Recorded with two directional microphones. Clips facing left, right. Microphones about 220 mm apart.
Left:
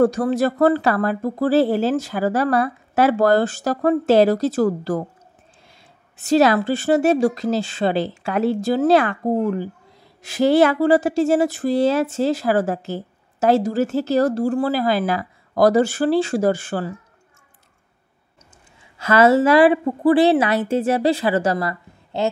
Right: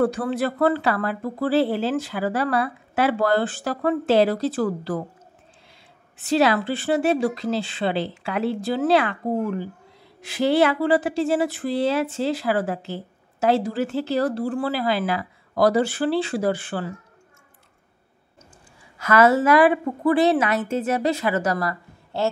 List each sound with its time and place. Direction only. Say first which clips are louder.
0.0 s speech: left 5 dB; 40° left (ahead or behind)
6.1 s speech: left 4 dB; 45° left (ahead or behind)
18.9 s a woman's voice: left 3 dB; 25° left (ahead or behind)